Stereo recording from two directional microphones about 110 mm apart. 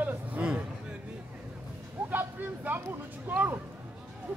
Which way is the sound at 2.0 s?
15° right (ahead or behind).